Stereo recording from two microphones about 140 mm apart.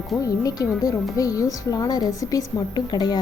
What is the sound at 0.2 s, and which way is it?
A woman's voice, 25° left (ahead or behind).